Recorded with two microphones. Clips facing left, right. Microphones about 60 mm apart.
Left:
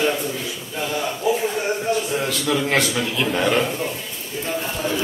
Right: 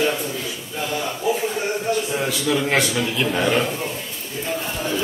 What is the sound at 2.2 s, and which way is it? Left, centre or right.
A man's voice, centre.